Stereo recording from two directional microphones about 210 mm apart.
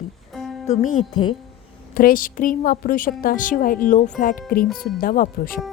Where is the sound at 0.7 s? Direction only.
35° left (ahead or behind).